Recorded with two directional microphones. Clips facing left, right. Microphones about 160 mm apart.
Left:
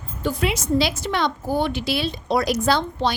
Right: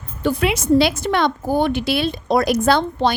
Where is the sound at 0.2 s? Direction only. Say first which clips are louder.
Right 4 dB; 65° right (ahead or behind).